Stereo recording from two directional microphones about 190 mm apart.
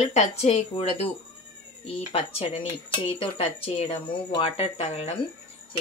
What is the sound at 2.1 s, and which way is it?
Speech, 30° left (ahead or behind).